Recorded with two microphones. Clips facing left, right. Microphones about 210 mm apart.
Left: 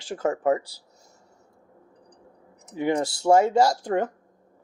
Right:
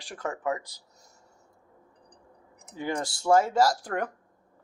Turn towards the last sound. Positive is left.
turn(degrees=25)  # may be behind; listen again after turning